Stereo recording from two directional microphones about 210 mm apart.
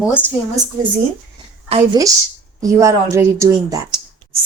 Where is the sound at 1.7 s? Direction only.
20° right (ahead or behind).